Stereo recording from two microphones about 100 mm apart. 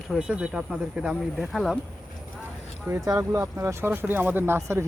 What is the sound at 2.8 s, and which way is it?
Speech, 25° right (ahead or behind).